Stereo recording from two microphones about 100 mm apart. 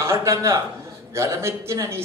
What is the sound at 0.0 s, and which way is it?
A man's voice, 30° right (ahead or behind).